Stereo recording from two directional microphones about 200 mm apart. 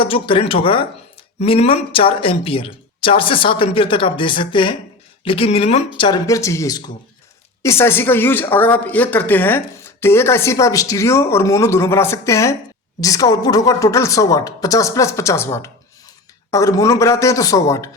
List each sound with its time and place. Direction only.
0.0 s a woman's voice: 25° left (ahead or behind)